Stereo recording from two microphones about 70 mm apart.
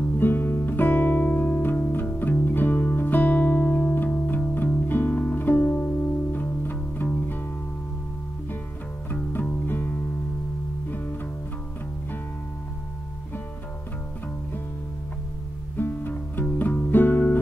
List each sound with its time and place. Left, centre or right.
0.2 s music: left
9.1 s music: left
15.8 s music: left